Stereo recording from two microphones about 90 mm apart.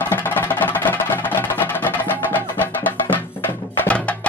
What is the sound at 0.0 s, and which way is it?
Music, 20° left (ahead or behind).